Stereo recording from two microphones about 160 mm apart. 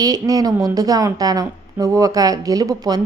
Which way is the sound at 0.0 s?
20° right (ahead or behind).